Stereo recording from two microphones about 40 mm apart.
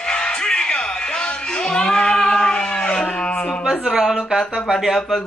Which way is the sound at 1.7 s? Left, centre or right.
Left.